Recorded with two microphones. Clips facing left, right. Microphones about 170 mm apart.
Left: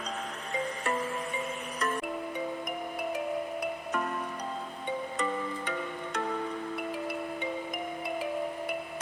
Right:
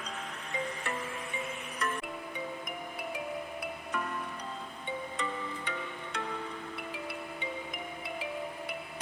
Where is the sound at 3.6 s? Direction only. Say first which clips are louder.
Left 4 dB; 45° left (ahead or behind).